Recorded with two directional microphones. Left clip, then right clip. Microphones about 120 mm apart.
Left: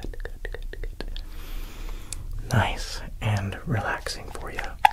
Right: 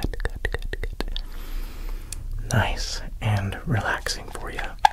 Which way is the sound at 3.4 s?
30° right (ahead or behind).